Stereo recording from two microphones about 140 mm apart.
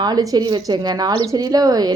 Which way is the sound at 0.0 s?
25° right (ahead or behind).